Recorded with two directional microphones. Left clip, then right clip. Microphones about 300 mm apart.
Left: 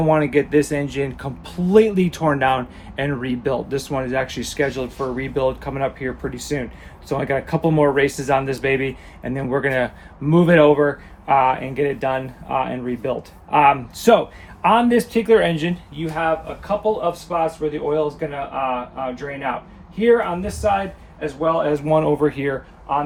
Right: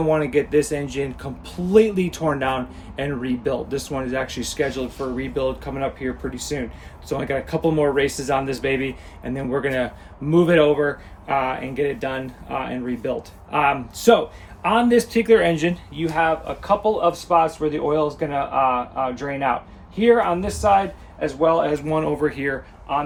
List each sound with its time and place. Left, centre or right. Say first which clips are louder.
0.0 s speech: left 2 dB; centre
15.1 s speech: even; centre